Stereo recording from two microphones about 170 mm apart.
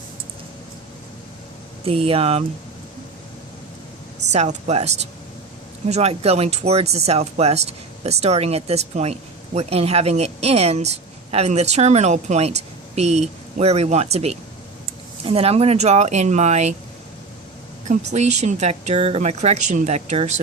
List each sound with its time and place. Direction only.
1.8 s a woman's voice: 35° right (ahead or behind)
4.3 s a woman's voice: 45° right (ahead or behind)
17.8 s a woman's voice: 40° right (ahead or behind)